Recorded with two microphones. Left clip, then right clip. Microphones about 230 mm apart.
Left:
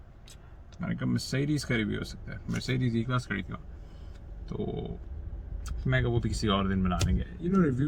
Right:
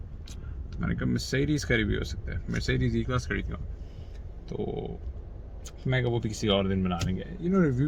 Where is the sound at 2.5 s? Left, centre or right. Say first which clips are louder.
Right 2 dB; centre.